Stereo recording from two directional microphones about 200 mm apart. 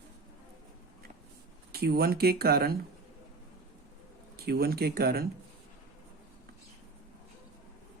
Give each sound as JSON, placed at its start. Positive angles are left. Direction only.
{"t": 1.7, "sound": "speech", "side_deg": -50}
{"t": 4.4, "sound": "speech", "side_deg": -50}